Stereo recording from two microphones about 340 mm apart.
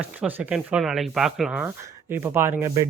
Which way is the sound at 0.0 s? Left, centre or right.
Centre.